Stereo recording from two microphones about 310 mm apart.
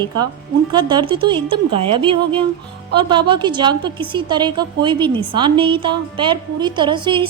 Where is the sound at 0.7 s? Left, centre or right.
Centre.